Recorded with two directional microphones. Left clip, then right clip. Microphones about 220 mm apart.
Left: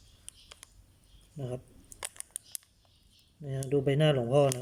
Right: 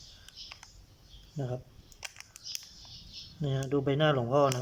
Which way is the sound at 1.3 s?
5° left (ahead or behind).